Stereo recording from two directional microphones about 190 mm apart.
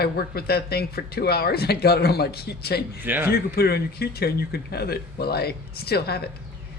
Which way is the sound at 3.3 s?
55° left (ahead or behind).